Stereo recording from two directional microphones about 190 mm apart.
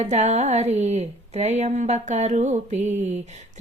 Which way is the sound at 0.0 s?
35° right (ahead or behind).